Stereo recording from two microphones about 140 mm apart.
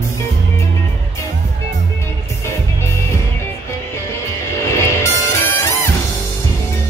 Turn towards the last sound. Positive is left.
turn(degrees=20)  # may be behind; listen again after turning